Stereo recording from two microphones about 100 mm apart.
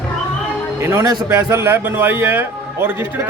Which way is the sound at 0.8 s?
25° right (ahead or behind).